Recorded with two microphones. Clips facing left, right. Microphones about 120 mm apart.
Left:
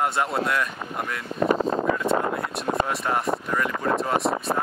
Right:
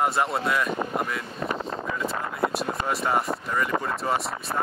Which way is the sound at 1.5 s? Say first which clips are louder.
Left 9 dB; 40° left (ahead or behind).